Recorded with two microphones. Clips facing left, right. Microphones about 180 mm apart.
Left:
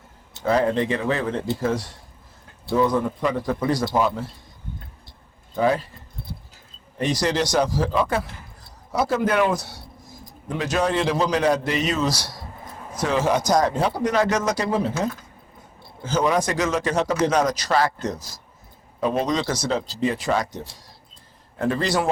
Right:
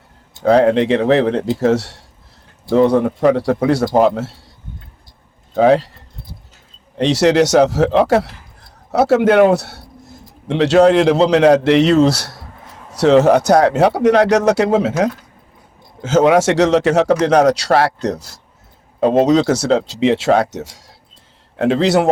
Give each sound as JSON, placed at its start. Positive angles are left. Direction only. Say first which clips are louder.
{"t": 0.4, "sound": "speech", "louder": "right 9 dB", "side_deg": -75}
{"t": 5.5, "sound": "speech", "louder": "right 9 dB", "side_deg": -75}
{"t": 7.0, "sound": "a man's voice", "louder": "right 10 dB", "side_deg": -80}
{"t": 18.9, "sound": "a man's voice", "louder": "right 10 dB", "side_deg": -90}
{"t": 19.9, "sound": "a man's voice", "louder": "right 9 dB", "side_deg": -85}